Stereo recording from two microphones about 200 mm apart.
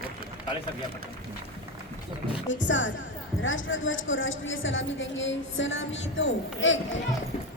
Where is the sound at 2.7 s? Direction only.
70° left (ahead or behind).